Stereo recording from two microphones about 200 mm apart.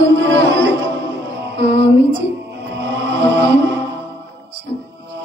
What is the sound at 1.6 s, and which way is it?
Female singing, 60° right (ahead or behind).